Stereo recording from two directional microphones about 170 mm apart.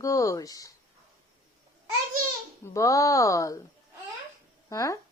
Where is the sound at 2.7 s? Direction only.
20° left (ahead or behind).